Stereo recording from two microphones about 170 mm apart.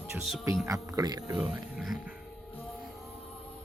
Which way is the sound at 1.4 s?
Centre (ahead or behind).